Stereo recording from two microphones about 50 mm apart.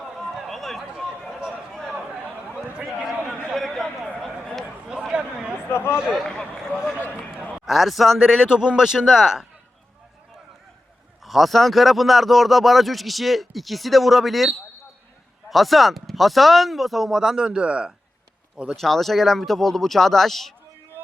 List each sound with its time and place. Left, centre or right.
0.4 s run: centre
0.8 s run: centre
2.8 s a man's voice: centre
3.5 s a sound: centre
4.9 s speech: centre
6.2 s speech: centre
7.1 s a man's voice: right
7.5 s speech: centre
8.4 s speech: centre
11.3 s speech: centre; by 17.9 s right
18.8 s speech: centre